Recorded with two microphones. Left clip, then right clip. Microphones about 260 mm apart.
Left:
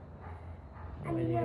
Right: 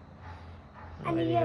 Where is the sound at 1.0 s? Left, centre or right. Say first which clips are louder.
Right 6 dB; right.